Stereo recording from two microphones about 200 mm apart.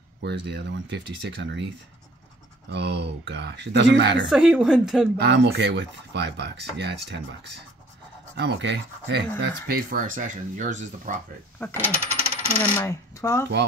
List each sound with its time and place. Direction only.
0.2 s speech: 60° right (ahead or behind)
2.7 s speech: 60° right (ahead or behind)
4.3 s speech: 5° right (ahead or behind)
5.2 s speech: 60° right (ahead or behind)
8.4 s speech: 60° right (ahead or behind)
9.4 s speech: 50° right (ahead or behind)
11.7 s coin: 10° right (ahead or behind)
12.4 s coin: 30° right (ahead or behind)
12.7 s coin: 15° left (ahead or behind)